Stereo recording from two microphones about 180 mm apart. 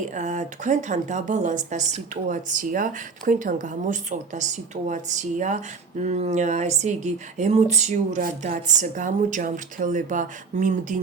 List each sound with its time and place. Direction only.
0.1 s a woman's voice: 40° right (ahead or behind)